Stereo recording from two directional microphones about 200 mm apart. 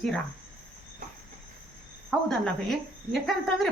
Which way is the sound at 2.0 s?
Centre (ahead or behind).